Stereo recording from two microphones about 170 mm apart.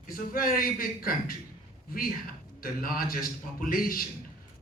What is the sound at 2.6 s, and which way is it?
A man's voice, 60° left (ahead or behind).